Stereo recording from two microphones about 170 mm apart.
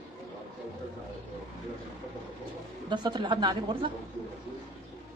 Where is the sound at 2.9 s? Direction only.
25° right (ahead or behind).